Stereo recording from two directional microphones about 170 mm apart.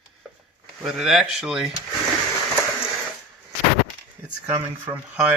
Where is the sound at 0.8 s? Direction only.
5° right (ahead or behind).